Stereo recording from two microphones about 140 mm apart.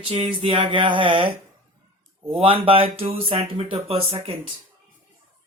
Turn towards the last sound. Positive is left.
turn(degrees=-40)  # may be behind; listen again after turning